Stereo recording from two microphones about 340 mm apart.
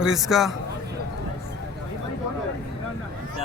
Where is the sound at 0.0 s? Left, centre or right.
Centre.